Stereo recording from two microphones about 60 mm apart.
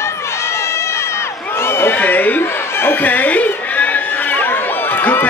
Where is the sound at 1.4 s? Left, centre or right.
Left.